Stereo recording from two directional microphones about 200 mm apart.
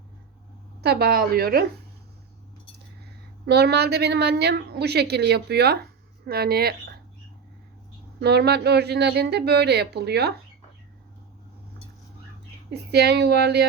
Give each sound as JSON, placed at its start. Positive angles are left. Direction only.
{"t": 0.8, "sound": "a woman's voice", "side_deg": -55}
{"t": 3.4, "sound": "a woman's voice", "side_deg": -55}
{"t": 8.2, "sound": "a woman's voice", "side_deg": -55}
{"t": 12.7, "sound": "a woman's voice", "side_deg": -55}